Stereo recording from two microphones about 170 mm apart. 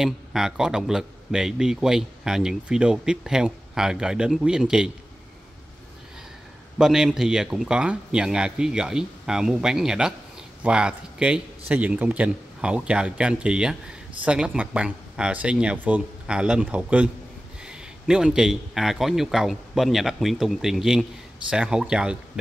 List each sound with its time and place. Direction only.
0.0 s speech: centre (ahead or behind)
6.8 s speech: 5° right (ahead or behind)